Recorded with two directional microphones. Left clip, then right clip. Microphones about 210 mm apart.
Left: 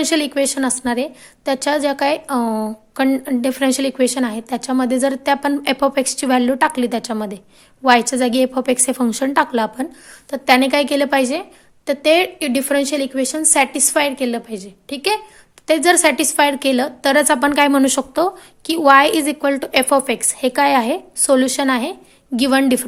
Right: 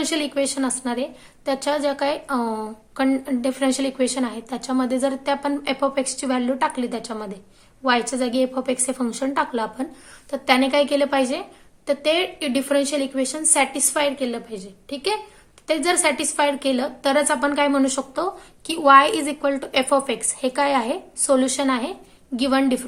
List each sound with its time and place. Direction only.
0.0 s a woman's voice: 30° left (ahead or behind)